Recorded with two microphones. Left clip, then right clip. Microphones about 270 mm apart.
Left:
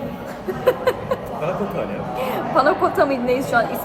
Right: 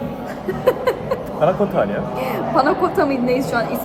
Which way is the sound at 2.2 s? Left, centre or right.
Centre.